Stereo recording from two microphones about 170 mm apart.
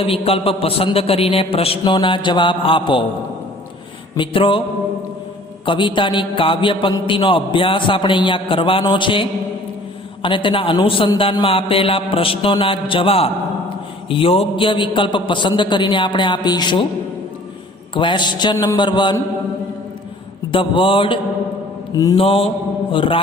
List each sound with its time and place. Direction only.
0.0 s a man's voice: 35° left (ahead or behind)
4.2 s a man's voice: 30° left (ahead or behind)
5.6 s a man's voice: 30° left (ahead or behind)
10.2 s a man's voice: 30° left (ahead or behind)
17.9 s a man's voice: 30° left (ahead or behind)
20.5 s a man's voice: 30° left (ahead or behind)
22.2 s a man's voice: 35° left (ahead or behind)